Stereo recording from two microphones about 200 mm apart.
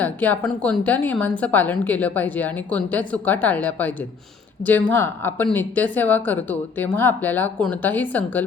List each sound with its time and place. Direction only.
0.0 s speech: 5° left (ahead or behind)